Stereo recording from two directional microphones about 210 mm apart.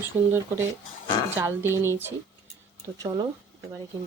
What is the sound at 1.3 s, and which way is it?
Speech, 10° right (ahead or behind).